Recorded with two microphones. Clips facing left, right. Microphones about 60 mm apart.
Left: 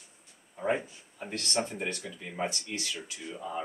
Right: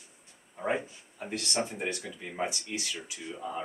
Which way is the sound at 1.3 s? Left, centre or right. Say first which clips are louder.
Even; centre.